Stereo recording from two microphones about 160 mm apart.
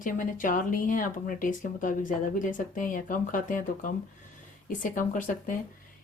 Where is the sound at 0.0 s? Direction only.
55° left (ahead or behind).